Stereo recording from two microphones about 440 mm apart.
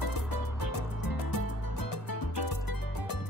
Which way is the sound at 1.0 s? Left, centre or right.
Left.